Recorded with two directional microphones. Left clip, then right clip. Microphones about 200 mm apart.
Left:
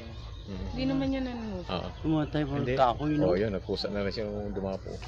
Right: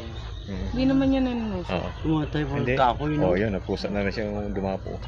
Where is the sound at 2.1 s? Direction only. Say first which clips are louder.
Right 2 dB; 50° left (ahead or behind).